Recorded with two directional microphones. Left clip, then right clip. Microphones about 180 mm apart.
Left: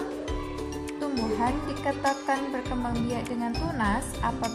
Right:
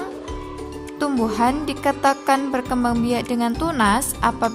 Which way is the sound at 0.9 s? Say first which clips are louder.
Right 8 dB; 30° right (ahead or behind).